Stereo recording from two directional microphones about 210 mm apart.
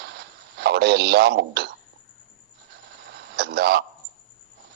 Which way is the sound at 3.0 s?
50° right (ahead or behind).